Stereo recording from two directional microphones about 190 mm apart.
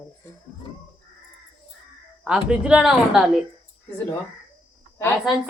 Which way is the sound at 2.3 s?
5° right (ahead or behind).